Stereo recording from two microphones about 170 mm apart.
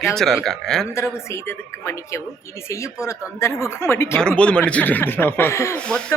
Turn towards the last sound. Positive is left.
turn(degrees=5)  # may be behind; listen again after turning